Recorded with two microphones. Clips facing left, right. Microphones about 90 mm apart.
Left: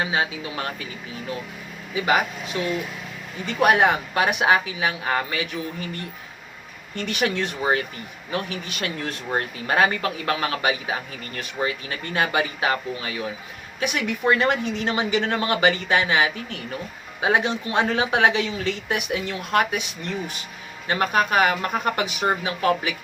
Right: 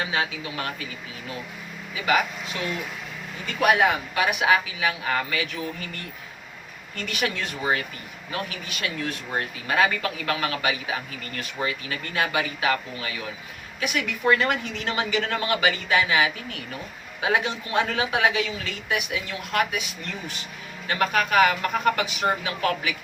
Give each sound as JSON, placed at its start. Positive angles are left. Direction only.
{"t": 0.0, "sound": "speech", "side_deg": 25}
{"t": 3.4, "sound": "speech", "side_deg": 30}